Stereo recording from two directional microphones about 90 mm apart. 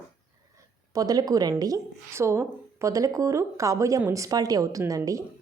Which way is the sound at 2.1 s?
30° right (ahead or behind).